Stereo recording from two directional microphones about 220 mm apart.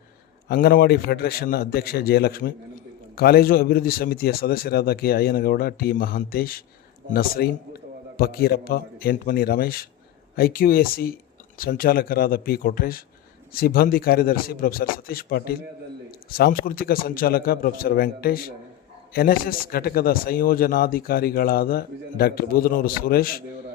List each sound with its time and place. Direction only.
0.4 s a man's voice: 45° left (ahead or behind)